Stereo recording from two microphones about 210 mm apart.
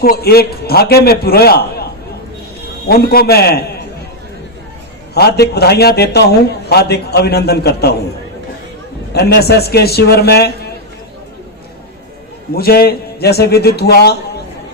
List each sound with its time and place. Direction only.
0.0 s a man's voice: 45° left (ahead or behind)
2.9 s a man's voice: 50° left (ahead or behind)
5.1 s a man's voice: 50° left (ahead or behind)
9.1 s a man's voice: 50° left (ahead or behind)
12.5 s a man's voice: 45° left (ahead or behind)